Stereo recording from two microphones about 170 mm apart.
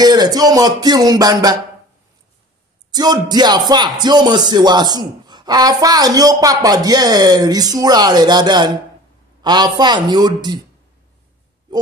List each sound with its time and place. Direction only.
0.0 s speech: 25° right (ahead or behind)
2.9 s speech: 25° right (ahead or behind)
11.7 s a sound: 25° right (ahead or behind)